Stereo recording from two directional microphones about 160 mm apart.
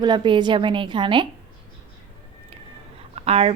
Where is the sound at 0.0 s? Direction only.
30° right (ahead or behind).